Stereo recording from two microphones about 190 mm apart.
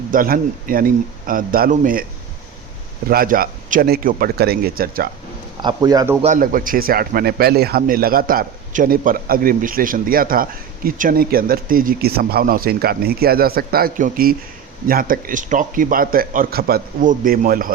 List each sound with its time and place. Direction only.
0.1 s a man's voice: 50° right (ahead or behind)
3.1 s a man's voice: 50° right (ahead or behind)
5.6 s a man's voice: 20° right (ahead or behind)
6.2 s a man's voice: 45° right (ahead or behind)